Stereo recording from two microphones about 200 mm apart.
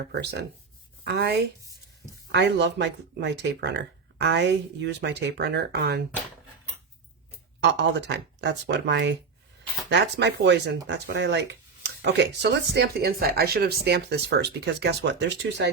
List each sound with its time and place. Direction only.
0.1 s speech: 55° right (ahead or behind)
7.6 s speech: 60° right (ahead or behind)